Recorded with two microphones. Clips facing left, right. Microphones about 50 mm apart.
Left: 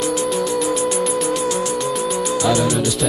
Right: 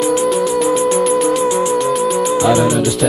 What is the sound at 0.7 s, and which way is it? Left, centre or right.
Music, centre.